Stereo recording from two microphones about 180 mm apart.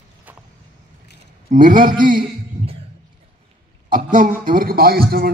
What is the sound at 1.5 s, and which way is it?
Speech, 50° right (ahead or behind).